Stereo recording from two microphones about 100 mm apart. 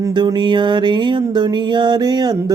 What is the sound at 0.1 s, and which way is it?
Music, 50° right (ahead or behind).